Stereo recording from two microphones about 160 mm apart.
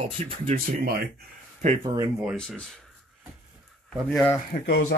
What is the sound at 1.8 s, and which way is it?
Speech, 20° right (ahead or behind).